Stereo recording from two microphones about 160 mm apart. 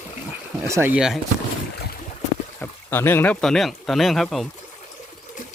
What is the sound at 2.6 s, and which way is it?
Speech, 15° left (ahead or behind).